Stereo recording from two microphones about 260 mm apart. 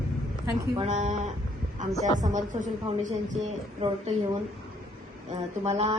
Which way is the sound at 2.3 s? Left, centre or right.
Right.